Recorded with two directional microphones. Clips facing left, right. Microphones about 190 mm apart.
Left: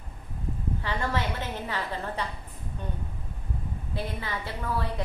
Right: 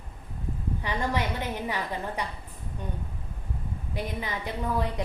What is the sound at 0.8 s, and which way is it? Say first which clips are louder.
A woman's voice: right 2 dB; 15° right (ahead or behind).